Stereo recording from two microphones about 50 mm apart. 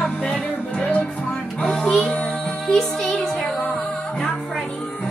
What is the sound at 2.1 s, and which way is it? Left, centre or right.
Music, left.